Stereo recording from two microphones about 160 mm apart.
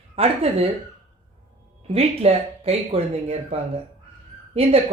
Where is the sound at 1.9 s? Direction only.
40° right (ahead or behind).